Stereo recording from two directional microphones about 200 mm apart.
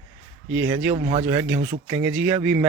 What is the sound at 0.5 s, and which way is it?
Speech, 5° right (ahead or behind).